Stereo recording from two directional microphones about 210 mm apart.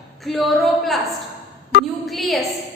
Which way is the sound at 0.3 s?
Centre (ahead or behind).